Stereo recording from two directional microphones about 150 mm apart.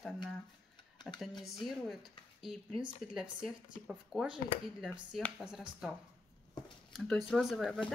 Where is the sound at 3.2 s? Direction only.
5° right (ahead or behind).